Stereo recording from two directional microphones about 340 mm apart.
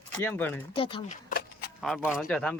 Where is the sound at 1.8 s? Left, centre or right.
Centre.